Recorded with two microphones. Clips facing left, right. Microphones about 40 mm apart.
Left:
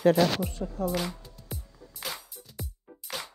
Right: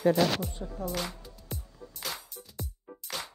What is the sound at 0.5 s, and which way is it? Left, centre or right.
Speech, left.